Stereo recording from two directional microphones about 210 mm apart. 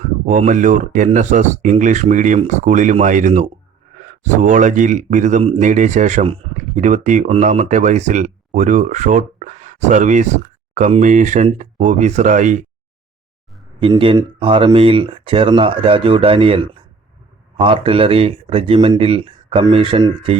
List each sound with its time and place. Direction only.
0.3 s a man's voice: 35° right (ahead or behind)
13.8 s speech: 25° right (ahead or behind)